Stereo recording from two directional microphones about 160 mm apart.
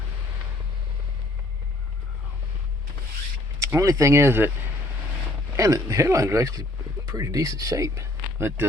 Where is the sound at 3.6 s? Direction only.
20° right (ahead or behind).